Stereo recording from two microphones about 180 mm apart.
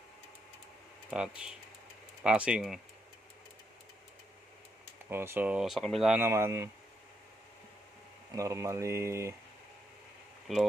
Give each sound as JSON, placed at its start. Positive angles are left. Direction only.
{"t": 1.1, "sound": "speech", "side_deg": -5}
{"t": 5.1, "sound": "speech", "side_deg": -10}
{"t": 8.4, "sound": "speech", "side_deg": -15}
{"t": 10.5, "sound": "speech", "side_deg": 0}